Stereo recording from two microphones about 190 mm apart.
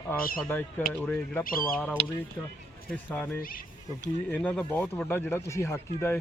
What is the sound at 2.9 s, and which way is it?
Speech, 10° left (ahead or behind).